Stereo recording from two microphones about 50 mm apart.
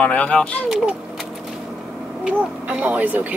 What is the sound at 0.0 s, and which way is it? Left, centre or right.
Speech, left.